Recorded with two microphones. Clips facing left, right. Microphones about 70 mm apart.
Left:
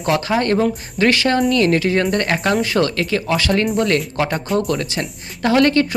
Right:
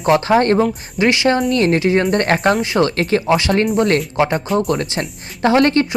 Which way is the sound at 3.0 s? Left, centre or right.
Right.